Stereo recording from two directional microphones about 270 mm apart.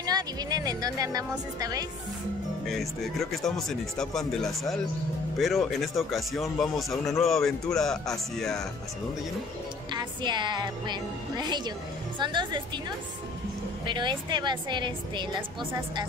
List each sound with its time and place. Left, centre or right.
0.0 s speech: centre
2.6 s speech: centre
9.9 s speech: centre
13.8 s speech: centre